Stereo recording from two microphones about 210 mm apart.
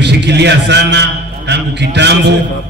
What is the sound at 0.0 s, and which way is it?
A man's voice, 55° right (ahead or behind).